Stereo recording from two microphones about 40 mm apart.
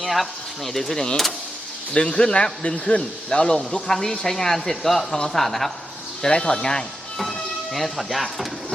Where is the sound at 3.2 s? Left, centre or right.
Centre.